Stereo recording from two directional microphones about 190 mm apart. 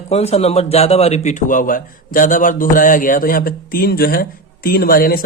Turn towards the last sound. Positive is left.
turn(degrees=50)  # may be behind; listen again after turning